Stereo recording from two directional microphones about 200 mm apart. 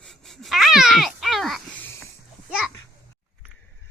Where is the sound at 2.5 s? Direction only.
5° right (ahead or behind).